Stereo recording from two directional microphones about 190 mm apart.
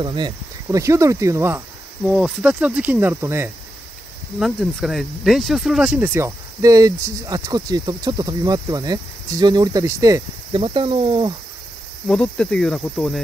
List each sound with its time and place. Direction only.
0.0 s speech: 25° right (ahead or behind)
4.4 s speech: centre (ahead or behind); by 11.3 s 30° right (ahead or behind)
12.1 s cricket: 5° left (ahead or behind)